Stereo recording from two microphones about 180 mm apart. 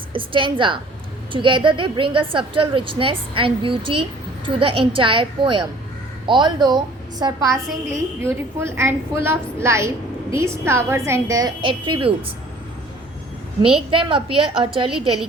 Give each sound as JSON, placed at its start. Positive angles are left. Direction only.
{"t": 0.1, "sound": "a woman's voice", "side_deg": -30}
{"t": 13.9, "sound": "a woman's voice", "side_deg": -30}